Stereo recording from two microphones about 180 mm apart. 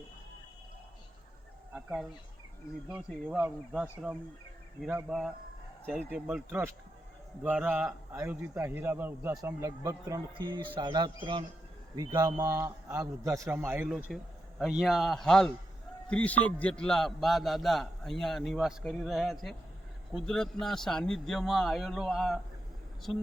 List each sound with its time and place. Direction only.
1.7 s bird: 5° right (ahead or behind)
2.9 s a man's voice: 5° right (ahead or behind)
13.9 s a man's voice: centre (ahead or behind)